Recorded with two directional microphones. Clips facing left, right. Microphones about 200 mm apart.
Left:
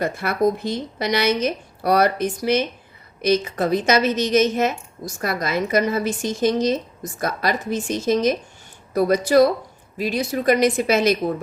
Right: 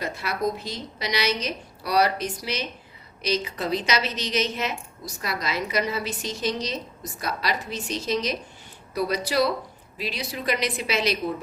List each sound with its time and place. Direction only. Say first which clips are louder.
0.0 s a woman's voice: left 7 dB; 55° left (ahead or behind)